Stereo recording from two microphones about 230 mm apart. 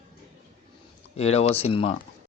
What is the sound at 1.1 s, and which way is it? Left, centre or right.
Speech, left.